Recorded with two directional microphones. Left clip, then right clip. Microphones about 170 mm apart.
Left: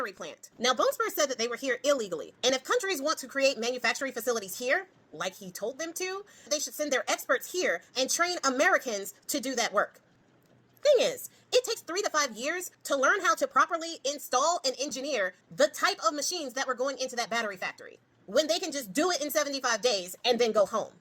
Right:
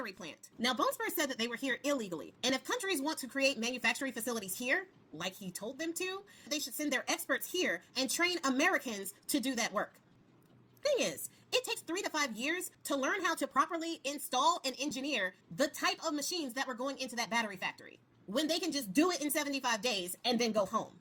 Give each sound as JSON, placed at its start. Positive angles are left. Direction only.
{"t": 0.0, "sound": "a woman's voice", "side_deg": -15}